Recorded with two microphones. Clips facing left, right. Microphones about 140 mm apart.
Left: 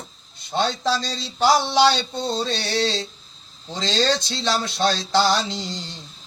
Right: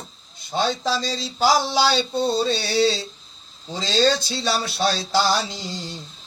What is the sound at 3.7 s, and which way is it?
Speech, 5° right (ahead or behind).